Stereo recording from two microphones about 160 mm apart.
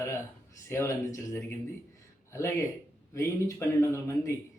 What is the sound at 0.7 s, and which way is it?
Speech, 15° left (ahead or behind).